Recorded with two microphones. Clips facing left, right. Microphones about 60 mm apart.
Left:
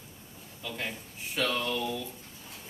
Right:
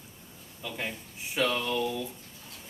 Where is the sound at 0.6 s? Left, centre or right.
Centre.